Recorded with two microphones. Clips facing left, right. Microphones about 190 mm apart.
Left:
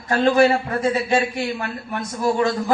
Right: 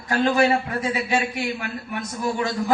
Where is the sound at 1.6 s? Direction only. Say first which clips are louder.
Left 2 dB; 45° left (ahead or behind).